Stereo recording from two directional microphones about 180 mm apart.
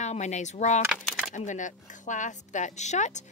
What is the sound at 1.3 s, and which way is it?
Speech, 45° left (ahead or behind).